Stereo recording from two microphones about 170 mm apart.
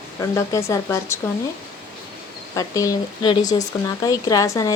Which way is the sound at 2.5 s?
20° left (ahead or behind).